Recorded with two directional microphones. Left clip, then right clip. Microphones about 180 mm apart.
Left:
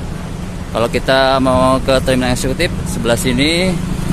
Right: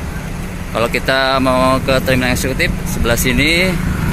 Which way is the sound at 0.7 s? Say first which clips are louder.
Left 1 dB; 15° left (ahead or behind).